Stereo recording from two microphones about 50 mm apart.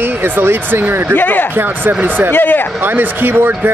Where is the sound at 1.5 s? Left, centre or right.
Right.